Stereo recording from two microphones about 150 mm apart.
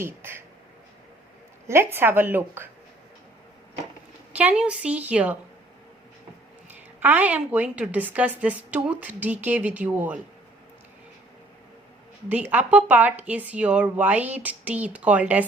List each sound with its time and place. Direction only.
0.0 s a woman's voice: 15° right (ahead or behind)
1.6 s a woman's voice: 15° right (ahead or behind)
4.3 s a woman's voice: 10° right (ahead or behind)
7.0 s a woman's voice: 10° right (ahead or behind)
12.5 s a woman's voice: 10° right (ahead or behind)